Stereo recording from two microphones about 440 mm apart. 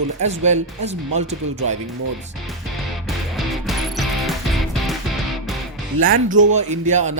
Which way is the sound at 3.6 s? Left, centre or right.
Centre.